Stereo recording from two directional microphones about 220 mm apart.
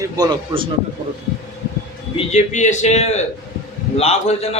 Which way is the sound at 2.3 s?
35° left (ahead or behind).